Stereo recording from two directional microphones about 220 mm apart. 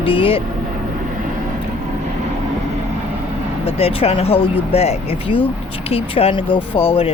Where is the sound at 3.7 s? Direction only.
25° left (ahead or behind).